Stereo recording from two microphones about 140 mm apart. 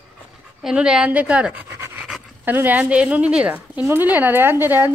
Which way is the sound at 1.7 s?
15° right (ahead or behind).